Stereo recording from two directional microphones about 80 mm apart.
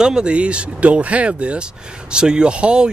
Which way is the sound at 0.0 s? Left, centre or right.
Centre.